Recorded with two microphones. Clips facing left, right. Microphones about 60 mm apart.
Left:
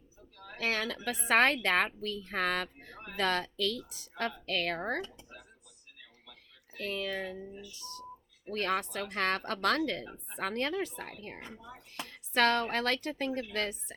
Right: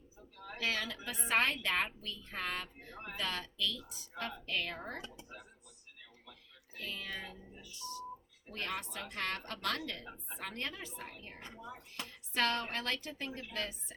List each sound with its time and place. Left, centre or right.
0.6 s a woman's voice: left
5.0 s a sound: centre
6.7 s speech: left
8.4 s a woman's voice: left